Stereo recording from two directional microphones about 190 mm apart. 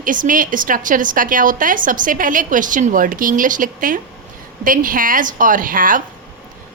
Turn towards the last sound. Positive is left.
turn(degrees=-45)  # may be behind; listen again after turning